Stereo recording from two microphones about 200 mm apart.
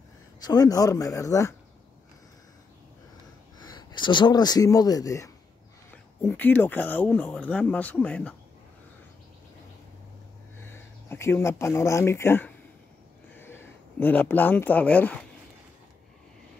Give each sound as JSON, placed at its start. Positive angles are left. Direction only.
{"t": 0.4, "sound": "speech", "side_deg": 20}
{"t": 3.5, "sound": "speech", "side_deg": 20}
{"t": 10.6, "sound": "speech", "side_deg": 10}